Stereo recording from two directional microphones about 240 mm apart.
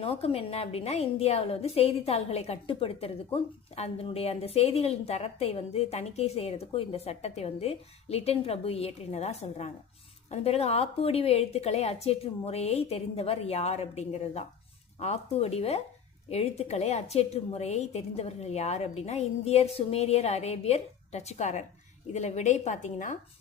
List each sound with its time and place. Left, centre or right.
0.0 s a woman's voice: left